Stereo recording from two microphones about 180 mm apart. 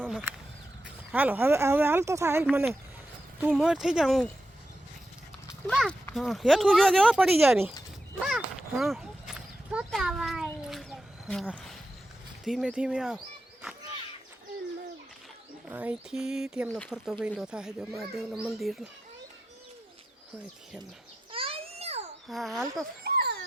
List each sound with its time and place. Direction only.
0.0 s a sound: centre (ahead or behind)
1.1 s speech: 10° right (ahead or behind)
5.6 s speech: 5° left (ahead or behind)
8.8 s a sound: centre (ahead or behind)
12.5 s speech: 5° right (ahead or behind)
15.7 s speech: 10° right (ahead or behind)
21.3 s babbling: 30° right (ahead or behind)
22.3 s speech: centre (ahead or behind)
23.0 s a sound: 65° right (ahead or behind)